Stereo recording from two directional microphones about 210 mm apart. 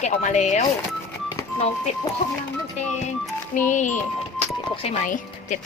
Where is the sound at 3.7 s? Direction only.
35° left (ahead or behind).